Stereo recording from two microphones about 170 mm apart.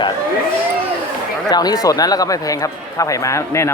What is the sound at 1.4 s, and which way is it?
Speech, 25° left (ahead or behind).